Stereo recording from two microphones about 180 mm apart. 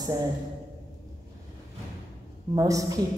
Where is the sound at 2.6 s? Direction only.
20° right (ahead or behind).